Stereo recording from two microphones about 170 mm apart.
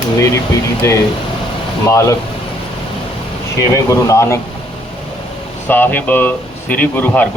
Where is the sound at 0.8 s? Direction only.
20° left (ahead or behind).